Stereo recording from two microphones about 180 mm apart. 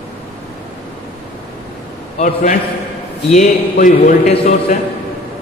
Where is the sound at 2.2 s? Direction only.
45° left (ahead or behind).